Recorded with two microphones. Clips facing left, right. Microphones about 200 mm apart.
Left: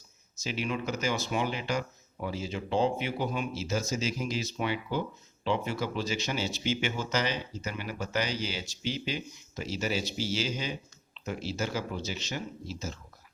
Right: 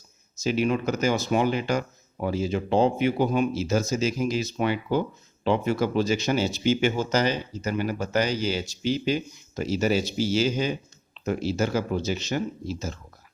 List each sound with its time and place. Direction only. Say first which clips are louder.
0.4 s speech: right 9 dB; 45° right (ahead or behind)